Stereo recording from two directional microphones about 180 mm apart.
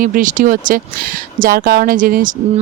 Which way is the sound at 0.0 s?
50° right (ahead or behind).